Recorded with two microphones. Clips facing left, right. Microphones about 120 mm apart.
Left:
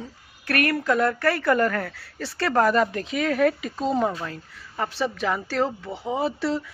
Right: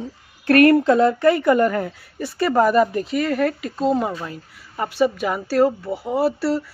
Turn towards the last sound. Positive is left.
turn(degrees=-5)  # may be behind; listen again after turning